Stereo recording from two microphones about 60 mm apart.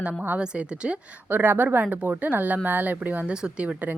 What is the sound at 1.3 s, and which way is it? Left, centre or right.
A woman's voice, right.